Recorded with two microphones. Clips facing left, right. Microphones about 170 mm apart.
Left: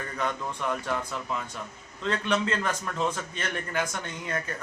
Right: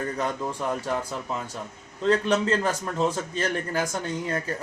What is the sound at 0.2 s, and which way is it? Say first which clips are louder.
A man's voice: right 3 dB; 35° right (ahead or behind).